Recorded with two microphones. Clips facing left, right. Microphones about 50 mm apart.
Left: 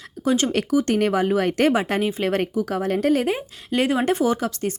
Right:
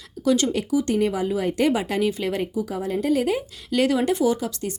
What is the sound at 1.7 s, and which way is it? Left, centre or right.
A woman's voice, left.